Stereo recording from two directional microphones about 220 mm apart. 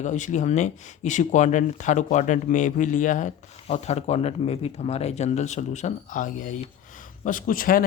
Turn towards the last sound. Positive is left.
turn(degrees=40)  # may be behind; listen again after turning